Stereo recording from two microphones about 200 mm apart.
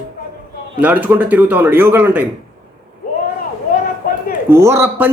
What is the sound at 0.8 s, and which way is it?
A man's voice, 10° right (ahead or behind).